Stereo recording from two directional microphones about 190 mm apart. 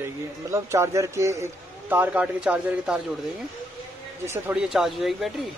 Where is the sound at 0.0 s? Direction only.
15° right (ahead or behind).